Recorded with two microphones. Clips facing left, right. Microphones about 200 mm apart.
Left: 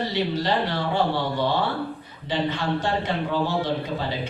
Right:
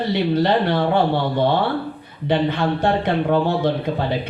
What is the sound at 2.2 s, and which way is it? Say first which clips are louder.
Speech: right 6 dB; 60° right (ahead or behind).